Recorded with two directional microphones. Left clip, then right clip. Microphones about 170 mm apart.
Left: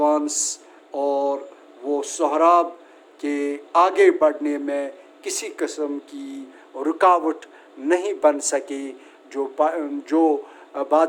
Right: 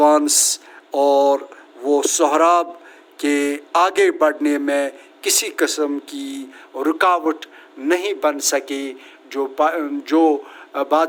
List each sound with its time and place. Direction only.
0.0 s a sound: 20° right (ahead or behind)
1.8 s a man's voice: 20° right (ahead or behind)
6.7 s a man's voice: 5° right (ahead or behind)